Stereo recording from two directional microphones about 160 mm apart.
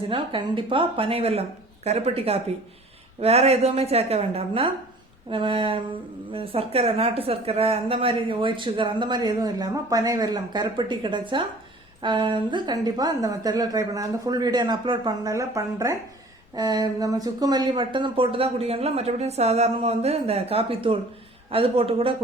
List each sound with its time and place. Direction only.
0.1 s a woman's voice: 30° right (ahead or behind)